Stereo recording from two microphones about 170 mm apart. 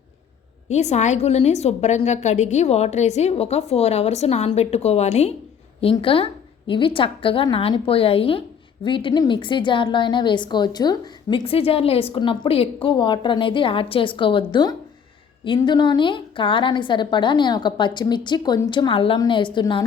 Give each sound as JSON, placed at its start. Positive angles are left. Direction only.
{"t": 0.7, "sound": "a woman's voice", "side_deg": 40}
{"t": 11.4, "sound": "a woman's voice", "side_deg": 35}